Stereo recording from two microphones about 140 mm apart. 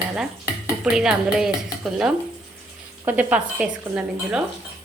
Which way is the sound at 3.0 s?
10° right (ahead or behind).